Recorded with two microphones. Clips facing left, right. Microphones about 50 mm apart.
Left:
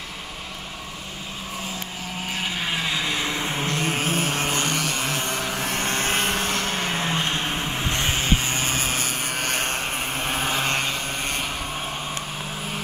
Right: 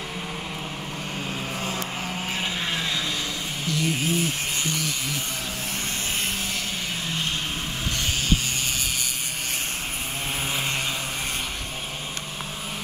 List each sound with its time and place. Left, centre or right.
2.7 s vehicle: centre
3.6 s music: left
5.7 s vehicle: left